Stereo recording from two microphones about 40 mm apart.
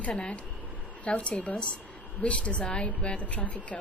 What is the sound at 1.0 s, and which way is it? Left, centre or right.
A woman's voice, left.